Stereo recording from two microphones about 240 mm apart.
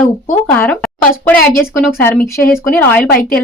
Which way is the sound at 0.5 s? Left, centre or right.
Centre.